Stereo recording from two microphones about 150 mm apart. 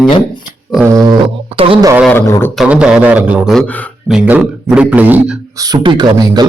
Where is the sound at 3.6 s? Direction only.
10° left (ahead or behind).